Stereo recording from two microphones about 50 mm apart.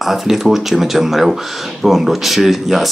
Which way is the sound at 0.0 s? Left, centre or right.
Centre.